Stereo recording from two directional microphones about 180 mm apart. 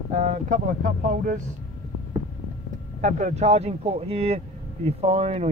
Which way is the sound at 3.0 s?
40° right (ahead or behind).